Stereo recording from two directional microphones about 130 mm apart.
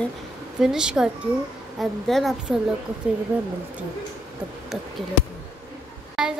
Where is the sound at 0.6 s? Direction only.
5° right (ahead or behind).